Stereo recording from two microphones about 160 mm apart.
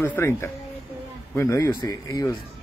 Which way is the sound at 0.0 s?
15° left (ahead or behind).